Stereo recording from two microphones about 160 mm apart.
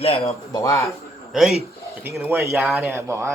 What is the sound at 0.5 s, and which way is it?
Speech, 20° left (ahead or behind).